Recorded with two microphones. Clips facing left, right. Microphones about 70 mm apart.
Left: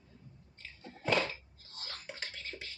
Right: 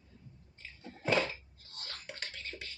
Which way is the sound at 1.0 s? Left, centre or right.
Centre.